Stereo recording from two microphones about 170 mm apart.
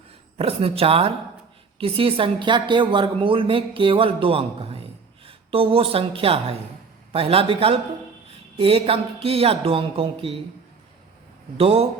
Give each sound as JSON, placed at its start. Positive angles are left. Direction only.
{"t": 0.3, "sound": "a woman's voice", "side_deg": -35}
{"t": 11.5, "sound": "a woman's voice", "side_deg": -35}